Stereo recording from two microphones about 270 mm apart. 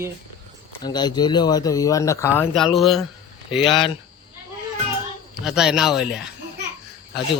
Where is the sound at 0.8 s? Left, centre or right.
Centre.